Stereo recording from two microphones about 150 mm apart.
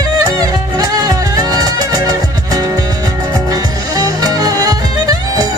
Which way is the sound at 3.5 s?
25° right (ahead or behind).